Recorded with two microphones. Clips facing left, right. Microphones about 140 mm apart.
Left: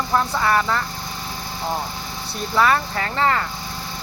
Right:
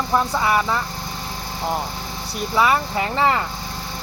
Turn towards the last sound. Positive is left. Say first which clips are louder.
# right 1 dB
turn(degrees=-15)  # may be behind; listen again after turning